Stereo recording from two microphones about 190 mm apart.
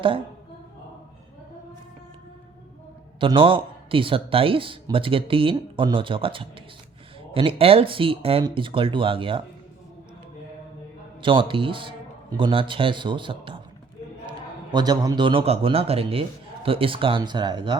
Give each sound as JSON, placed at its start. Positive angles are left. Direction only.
{"t": 3.2, "sound": "a man's voice", "side_deg": -25}
{"t": 11.2, "sound": "a man's voice", "side_deg": -25}